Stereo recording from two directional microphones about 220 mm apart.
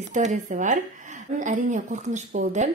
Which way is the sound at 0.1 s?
35° right (ahead or behind).